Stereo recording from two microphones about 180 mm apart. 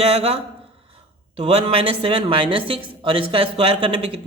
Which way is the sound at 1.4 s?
35° right (ahead or behind).